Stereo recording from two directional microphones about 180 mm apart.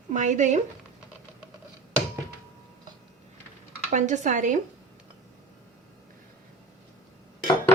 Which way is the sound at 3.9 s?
40° right (ahead or behind).